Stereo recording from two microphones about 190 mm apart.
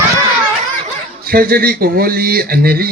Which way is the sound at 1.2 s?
50° right (ahead or behind).